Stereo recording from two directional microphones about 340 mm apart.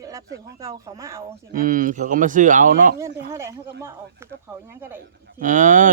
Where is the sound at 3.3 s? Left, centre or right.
Centre.